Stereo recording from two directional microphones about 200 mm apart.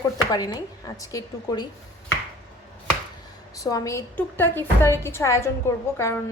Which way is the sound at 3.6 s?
15° left (ahead or behind).